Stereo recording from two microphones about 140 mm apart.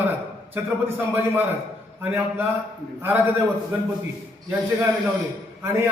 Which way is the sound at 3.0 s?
15° right (ahead or behind).